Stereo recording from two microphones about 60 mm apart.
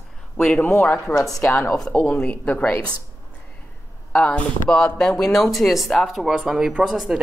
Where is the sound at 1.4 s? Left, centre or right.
Left.